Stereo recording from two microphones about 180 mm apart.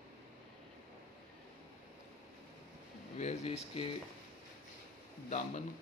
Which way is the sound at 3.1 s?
35° left (ahead or behind).